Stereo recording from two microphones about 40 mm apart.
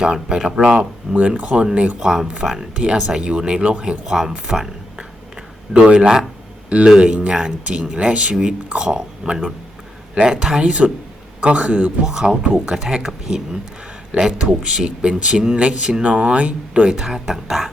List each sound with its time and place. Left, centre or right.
0.0 s speech: centre
0.8 s a man's voice: right
2.0 s speech: centre
2.2 s speech: right
4.0 s speech: centre
5.7 s speech: right
7.0 s speech: right
10.6 s a man's voice: right
12.0 s speech: centre; by 16.9 s right
16.9 s speech: centre